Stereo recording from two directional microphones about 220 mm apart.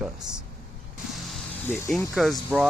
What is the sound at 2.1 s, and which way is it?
Speech, centre (ahead or behind).